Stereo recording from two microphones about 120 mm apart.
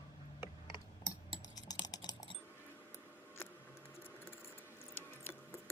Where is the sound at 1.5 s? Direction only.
30° left (ahead or behind).